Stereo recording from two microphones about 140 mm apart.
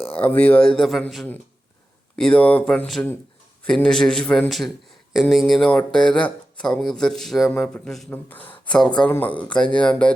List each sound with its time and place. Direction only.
0.0 s speech: 45° left (ahead or behind)
0.3 s speech: 10° left (ahead or behind)